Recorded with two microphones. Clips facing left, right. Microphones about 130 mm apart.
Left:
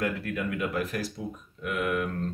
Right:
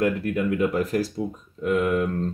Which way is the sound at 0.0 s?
25° right (ahead or behind).